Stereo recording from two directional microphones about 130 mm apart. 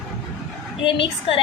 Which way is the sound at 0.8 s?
40° left (ahead or behind).